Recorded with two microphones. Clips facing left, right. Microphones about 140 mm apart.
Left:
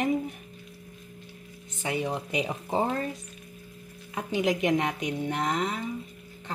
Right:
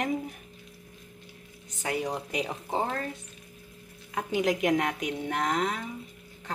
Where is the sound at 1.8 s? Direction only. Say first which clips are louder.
Left 1 dB; centre (ahead or behind).